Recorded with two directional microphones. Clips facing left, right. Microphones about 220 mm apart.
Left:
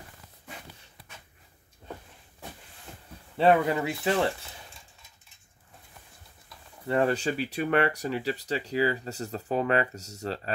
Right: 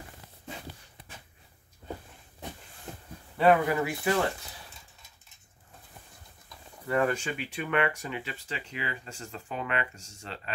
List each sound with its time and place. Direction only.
3.3 s speech: 25° left (ahead or behind)
6.9 s speech: 30° left (ahead or behind)